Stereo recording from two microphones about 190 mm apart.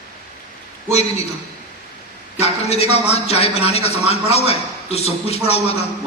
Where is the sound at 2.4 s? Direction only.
35° left (ahead or behind).